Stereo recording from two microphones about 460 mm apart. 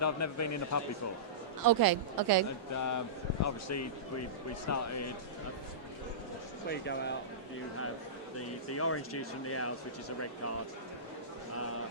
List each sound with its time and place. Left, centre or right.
0.0 s speech: left
1.6 s speech: right
2.7 s speech: left
6.7 s speech: left
8.4 s speech: left
11.5 s speech: left